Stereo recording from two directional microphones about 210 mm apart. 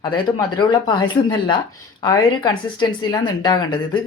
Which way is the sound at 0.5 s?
20° left (ahead or behind).